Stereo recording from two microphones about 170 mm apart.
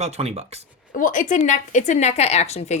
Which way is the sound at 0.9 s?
50° left (ahead or behind).